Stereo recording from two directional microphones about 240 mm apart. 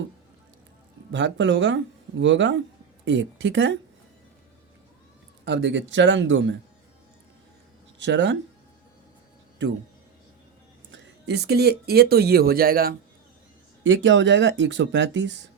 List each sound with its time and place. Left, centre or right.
1.1 s speech: right
5.5 s speech: right
7.9 s speech: right
10.9 s speech: right
13.8 s speech: right